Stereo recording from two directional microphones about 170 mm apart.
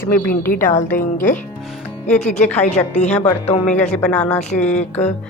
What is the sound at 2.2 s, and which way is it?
Speech, 45° left (ahead or behind).